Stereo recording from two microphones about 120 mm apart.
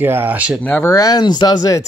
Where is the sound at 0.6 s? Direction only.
10° left (ahead or behind).